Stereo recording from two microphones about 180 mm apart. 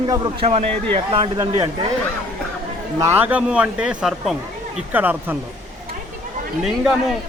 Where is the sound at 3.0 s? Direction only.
10° right (ahead or behind).